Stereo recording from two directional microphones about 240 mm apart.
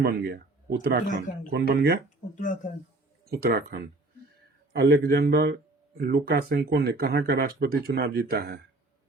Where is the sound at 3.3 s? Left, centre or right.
Right.